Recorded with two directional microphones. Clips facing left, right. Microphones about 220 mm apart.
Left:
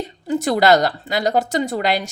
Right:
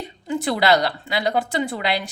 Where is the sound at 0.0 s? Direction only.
40° left (ahead or behind).